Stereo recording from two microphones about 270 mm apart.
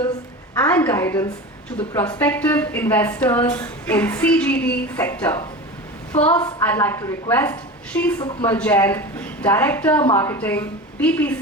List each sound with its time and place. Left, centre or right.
0.6 s a woman's voice: centre
8.2 s a woman's voice: centre
8.4 s a woman's voice: centre
10.1 s a woman's voice: centre
10.3 s speech: centre